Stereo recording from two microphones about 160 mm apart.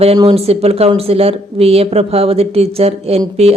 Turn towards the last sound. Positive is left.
turn(degrees=-40)  # may be behind; listen again after turning